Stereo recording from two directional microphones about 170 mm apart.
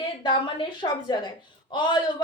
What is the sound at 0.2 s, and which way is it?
A woman's voice, 30° left (ahead or behind).